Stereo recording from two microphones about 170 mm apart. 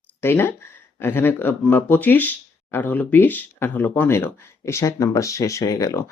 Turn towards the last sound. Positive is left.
turn(degrees=20)  # may be behind; listen again after turning